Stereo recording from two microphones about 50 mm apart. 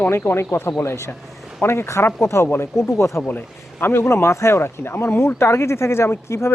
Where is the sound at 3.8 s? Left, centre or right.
Left.